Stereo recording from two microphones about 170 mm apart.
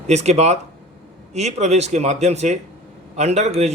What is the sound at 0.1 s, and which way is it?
A man's voice, 40° right (ahead or behind).